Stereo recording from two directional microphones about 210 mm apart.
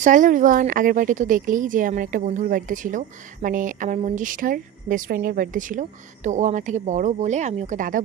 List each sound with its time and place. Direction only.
0.0 s a woman's voice: 35° right (ahead or behind)